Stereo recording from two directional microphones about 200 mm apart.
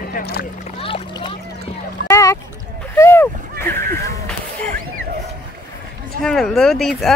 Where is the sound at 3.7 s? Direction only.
45° right (ahead or behind).